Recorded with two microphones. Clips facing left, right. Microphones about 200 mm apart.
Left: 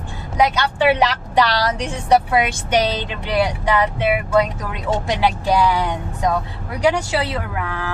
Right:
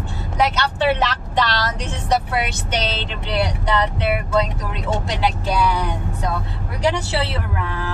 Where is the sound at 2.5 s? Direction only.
15° left (ahead or behind).